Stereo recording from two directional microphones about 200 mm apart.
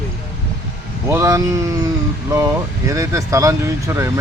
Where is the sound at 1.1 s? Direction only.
15° right (ahead or behind).